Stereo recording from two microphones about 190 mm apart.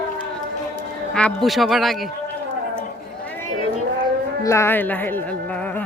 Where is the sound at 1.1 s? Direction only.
5° left (ahead or behind).